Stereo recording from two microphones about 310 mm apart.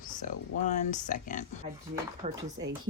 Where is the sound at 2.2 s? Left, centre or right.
Right.